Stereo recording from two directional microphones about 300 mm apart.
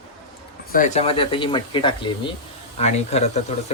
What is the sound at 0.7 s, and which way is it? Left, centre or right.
Speech, left.